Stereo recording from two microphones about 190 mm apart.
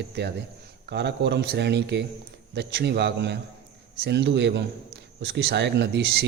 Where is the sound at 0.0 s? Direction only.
60° right (ahead or behind).